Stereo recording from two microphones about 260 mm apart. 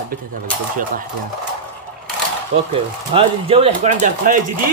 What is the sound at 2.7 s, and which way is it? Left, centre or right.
Speech, right.